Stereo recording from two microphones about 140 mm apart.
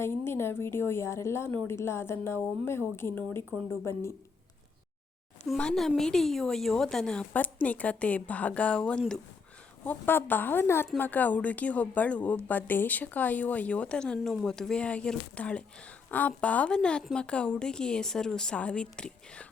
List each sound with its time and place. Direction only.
0.0 s a woman's voice: 15° left (ahead or behind)
5.5 s a woman's voice: 5° left (ahead or behind)